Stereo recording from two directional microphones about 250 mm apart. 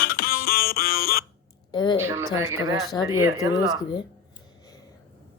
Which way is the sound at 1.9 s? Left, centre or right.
Centre.